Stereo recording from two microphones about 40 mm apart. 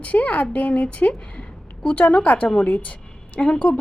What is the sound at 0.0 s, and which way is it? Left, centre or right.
A woman's voice, left.